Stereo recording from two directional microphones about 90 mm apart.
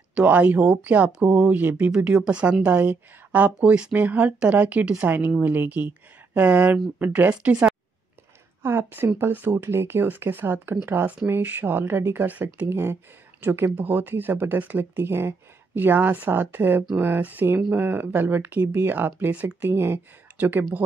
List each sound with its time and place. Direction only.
0.1 s speech: 15° right (ahead or behind)
8.6 s speech: 25° right (ahead or behind)